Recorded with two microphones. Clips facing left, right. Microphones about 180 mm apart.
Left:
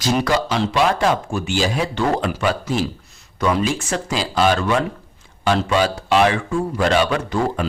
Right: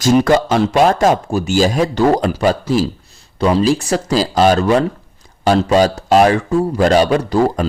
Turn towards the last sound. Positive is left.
turn(degrees=-35)  # may be behind; listen again after turning